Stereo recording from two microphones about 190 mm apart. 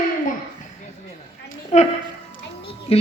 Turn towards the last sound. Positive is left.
turn(degrees=30)  # may be behind; listen again after turning